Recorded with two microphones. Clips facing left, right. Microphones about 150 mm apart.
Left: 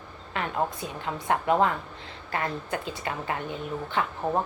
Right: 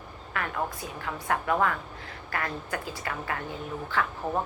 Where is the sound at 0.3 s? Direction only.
25° left (ahead or behind).